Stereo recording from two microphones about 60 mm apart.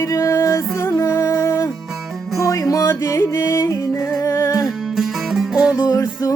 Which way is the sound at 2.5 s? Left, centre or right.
Left.